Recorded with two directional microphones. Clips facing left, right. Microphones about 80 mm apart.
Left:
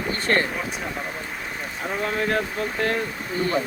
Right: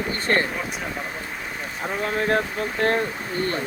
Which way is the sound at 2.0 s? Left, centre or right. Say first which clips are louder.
Right 2 dB; right.